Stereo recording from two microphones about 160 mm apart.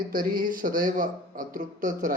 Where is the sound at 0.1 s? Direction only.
65° right (ahead or behind).